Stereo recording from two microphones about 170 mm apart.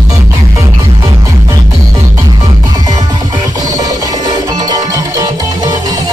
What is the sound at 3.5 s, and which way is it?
Music, 20° right (ahead or behind).